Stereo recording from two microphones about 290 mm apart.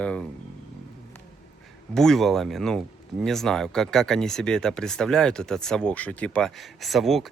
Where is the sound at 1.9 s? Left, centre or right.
Centre.